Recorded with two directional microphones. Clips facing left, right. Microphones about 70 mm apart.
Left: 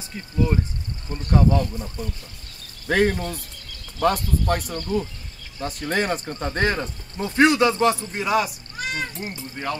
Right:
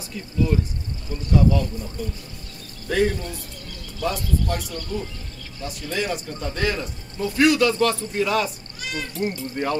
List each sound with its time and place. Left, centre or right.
0.1 s speech: left
8.7 s cat: left
9.6 s speech: centre